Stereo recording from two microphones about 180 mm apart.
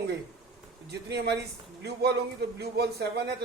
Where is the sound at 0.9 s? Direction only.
65° right (ahead or behind).